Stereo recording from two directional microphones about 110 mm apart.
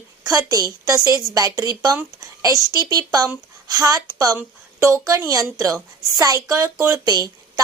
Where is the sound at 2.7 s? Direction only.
35° right (ahead or behind).